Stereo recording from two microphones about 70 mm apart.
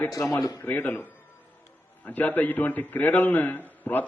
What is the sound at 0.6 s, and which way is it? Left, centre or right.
A man's voice, left.